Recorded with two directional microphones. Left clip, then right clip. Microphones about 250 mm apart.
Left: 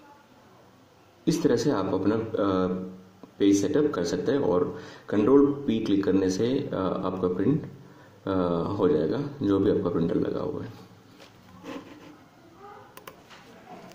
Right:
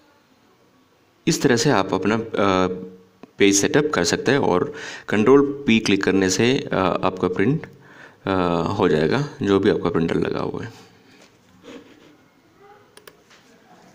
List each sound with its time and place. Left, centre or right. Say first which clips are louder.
1.4 s speech: right 7 dB; right